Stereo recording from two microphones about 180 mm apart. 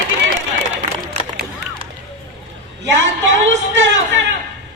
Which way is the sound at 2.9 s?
90° right.